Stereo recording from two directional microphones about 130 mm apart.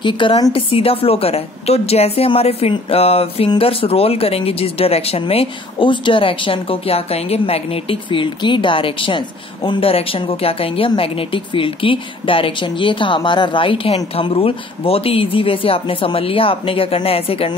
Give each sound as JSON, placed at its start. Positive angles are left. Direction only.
{"t": 0.0, "sound": "speech", "side_deg": 40}